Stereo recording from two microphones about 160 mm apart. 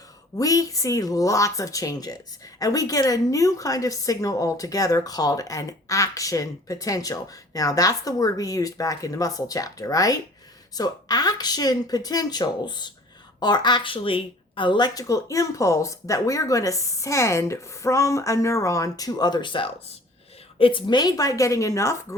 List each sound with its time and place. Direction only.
0.3 s a woman's voice: 20° left (ahead or behind)